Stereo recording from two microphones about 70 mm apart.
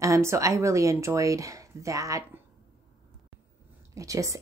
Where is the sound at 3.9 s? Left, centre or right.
Right.